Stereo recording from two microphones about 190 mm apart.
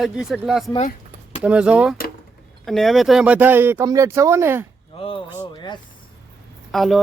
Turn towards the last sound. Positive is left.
turn(degrees=0)  # may be behind; listen again after turning